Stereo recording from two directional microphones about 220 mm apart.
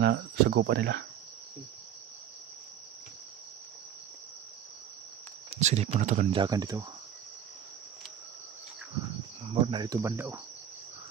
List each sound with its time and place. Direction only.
0.0 s speech: 50° right (ahead or behind)
5.5 s a sound: 30° right (ahead or behind)
5.9 s speech: 35° right (ahead or behind)
6.3 s speech: 20° right (ahead or behind)
9.5 s cricket: 25° right (ahead or behind)